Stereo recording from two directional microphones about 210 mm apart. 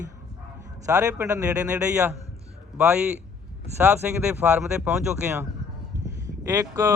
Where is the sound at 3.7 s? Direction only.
10° right (ahead or behind).